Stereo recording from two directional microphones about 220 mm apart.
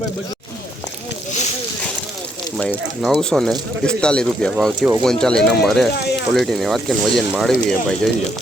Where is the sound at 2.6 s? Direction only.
5° left (ahead or behind).